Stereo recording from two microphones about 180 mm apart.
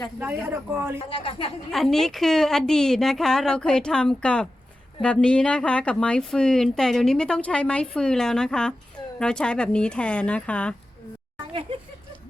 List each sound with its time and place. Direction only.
0.2 s speech: 10° right (ahead or behind)
1.1 s a woman's voice: 30° left (ahead or behind)
1.7 s a woman's voice: centre (ahead or behind)
11.7 s a sound: 30° right (ahead or behind)